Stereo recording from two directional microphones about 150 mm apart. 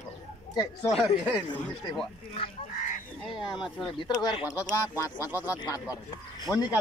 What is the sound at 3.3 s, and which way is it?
Speech, 30° left (ahead or behind).